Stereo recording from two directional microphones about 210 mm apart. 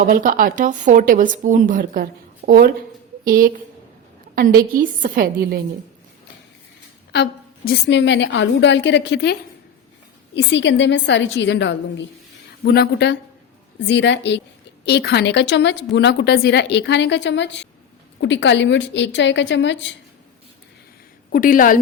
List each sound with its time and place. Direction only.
0.0 s a woman's voice: 40° right (ahead or behind)
7.1 s a woman's voice: 50° left (ahead or behind)
21.3 s a woman's voice: 40° left (ahead or behind)